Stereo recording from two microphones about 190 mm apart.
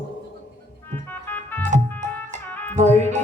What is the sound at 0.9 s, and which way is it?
Organ, 10° left (ahead or behind).